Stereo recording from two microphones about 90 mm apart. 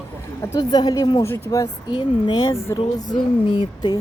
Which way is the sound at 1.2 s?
25° left (ahead or behind).